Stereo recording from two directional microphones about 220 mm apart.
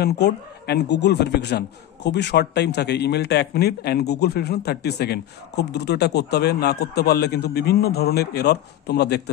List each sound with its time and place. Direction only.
0.0 s a man's voice: 50° left (ahead or behind)